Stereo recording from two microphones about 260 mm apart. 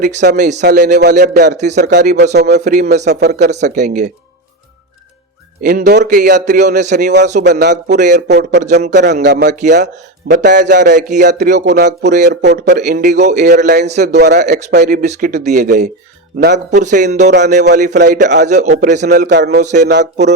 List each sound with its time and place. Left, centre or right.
0.0 s a man's voice: right
1.9 s a man's voice: right
5.6 s a man's voice: right
7.5 s a man's voice: right
8.6 s a man's voice: right
8.9 s a man's voice: right
9.5 s a man's voice: right
11.6 s a man's voice: right
12.8 s a man's voice: right
14.1 s a man's voice: right
19.5 s a man's voice: right
19.9 s a man's voice: right